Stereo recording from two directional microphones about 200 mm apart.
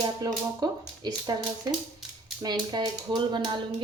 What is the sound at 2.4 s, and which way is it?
Speech, 20° right (ahead or behind).